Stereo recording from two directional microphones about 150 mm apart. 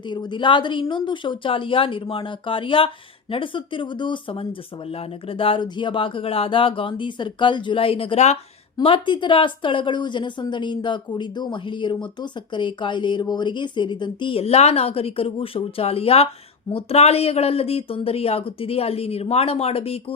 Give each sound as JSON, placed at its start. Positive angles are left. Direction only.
{"t": 0.1, "sound": "a woman's voice", "side_deg": 30}
{"t": 8.8, "sound": "a woman's voice", "side_deg": 35}